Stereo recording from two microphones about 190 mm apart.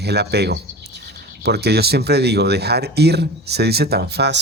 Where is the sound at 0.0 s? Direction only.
60° right (ahead or behind).